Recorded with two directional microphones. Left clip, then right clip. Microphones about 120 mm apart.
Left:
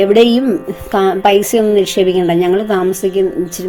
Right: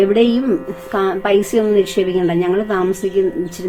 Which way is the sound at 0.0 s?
50° left (ahead or behind).